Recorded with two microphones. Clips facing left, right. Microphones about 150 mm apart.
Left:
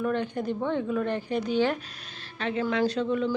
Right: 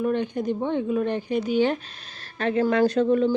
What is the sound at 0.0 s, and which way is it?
Speech, 15° right (ahead or behind).